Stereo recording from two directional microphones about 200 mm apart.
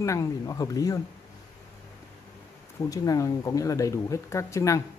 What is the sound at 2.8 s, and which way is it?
Speech, 20° left (ahead or behind).